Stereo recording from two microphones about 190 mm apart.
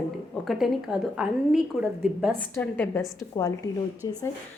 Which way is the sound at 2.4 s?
10° left (ahead or behind).